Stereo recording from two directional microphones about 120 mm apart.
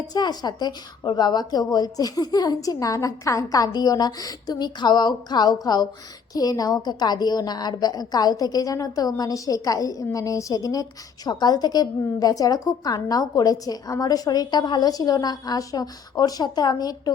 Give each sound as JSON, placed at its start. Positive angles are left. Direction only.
{"t": 0.1, "sound": "a woman's voice", "side_deg": 35}